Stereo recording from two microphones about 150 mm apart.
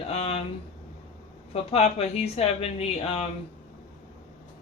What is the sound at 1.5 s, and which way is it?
Speech, 45° left (ahead or behind).